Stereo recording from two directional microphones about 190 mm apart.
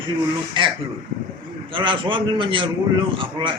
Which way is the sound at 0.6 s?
25° right (ahead or behind).